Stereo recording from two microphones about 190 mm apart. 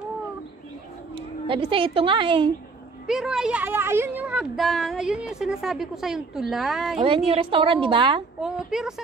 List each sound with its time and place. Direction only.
1.5 s a woman's voice: 25° right (ahead or behind)
3.1 s a woman's voice: centre (ahead or behind)
7.2 s a woman's voice: 30° right (ahead or behind)
8.4 s a woman's voice: 5° right (ahead or behind)